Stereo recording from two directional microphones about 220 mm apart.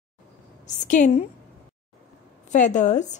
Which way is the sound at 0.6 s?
35° left (ahead or behind).